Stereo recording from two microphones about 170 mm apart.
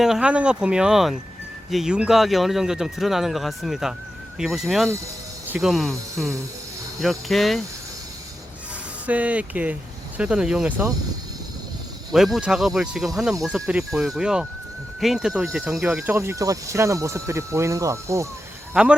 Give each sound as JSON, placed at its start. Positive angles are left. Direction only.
{"t": 0.0, "sound": "speech", "side_deg": -5}
{"t": 6.1, "sound": "speech", "side_deg": -20}
{"t": 7.0, "sound": "speech", "side_deg": 0}
{"t": 9.0, "sound": "speech", "side_deg": -10}
{"t": 12.1, "sound": "speech", "side_deg": 0}
{"t": 18.7, "sound": "speech", "side_deg": -5}